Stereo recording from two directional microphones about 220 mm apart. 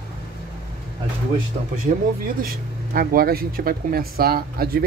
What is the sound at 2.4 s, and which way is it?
Speech, 40° right (ahead or behind).